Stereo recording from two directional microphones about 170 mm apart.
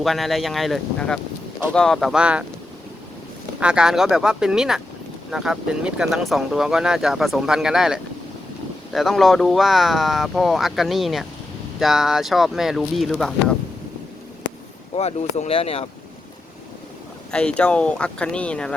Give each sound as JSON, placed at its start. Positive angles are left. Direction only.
{"t": 0.0, "sound": "speech", "side_deg": 0}
{"t": 3.6, "sound": "speech", "side_deg": -5}
{"t": 14.9, "sound": "speech", "side_deg": 40}
{"t": 17.3, "sound": "speech", "side_deg": 5}